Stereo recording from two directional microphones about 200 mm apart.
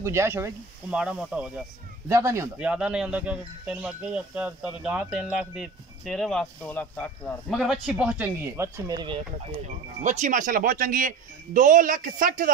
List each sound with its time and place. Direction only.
0.0 s speech: 15° right (ahead or behind)
10.0 s speech: 40° right (ahead or behind)